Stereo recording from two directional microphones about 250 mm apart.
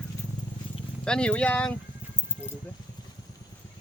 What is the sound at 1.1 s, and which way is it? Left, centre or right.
Speech, centre.